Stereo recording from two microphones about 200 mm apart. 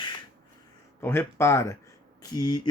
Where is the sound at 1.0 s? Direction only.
10° left (ahead or behind).